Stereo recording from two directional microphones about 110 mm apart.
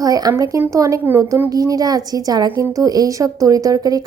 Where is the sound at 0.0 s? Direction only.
35° right (ahead or behind).